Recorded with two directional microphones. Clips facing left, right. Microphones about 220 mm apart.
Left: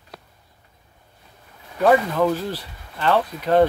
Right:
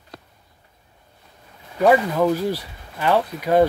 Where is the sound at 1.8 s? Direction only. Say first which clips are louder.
Right 1 dB; 10° right (ahead or behind).